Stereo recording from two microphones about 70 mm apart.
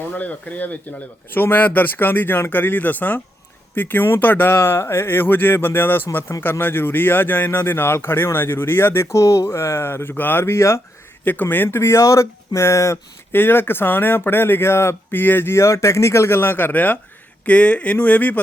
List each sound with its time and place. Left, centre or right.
0.1 s speech: left
11.3 s speech: left
13.3 s speech: left